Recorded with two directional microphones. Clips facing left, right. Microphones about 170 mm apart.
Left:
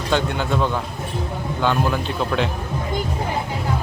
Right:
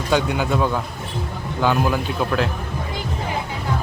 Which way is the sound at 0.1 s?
5° right (ahead or behind).